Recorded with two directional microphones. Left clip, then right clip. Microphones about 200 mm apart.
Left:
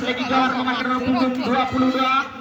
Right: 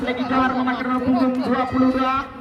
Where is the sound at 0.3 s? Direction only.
35° right (ahead or behind).